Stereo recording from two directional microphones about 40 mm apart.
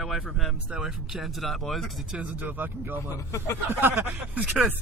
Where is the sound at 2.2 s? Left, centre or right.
Right.